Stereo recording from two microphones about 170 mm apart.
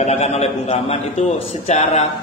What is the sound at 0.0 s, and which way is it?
A man's voice, 40° left (ahead or behind).